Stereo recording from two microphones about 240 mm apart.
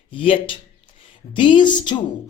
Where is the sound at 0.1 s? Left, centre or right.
Left.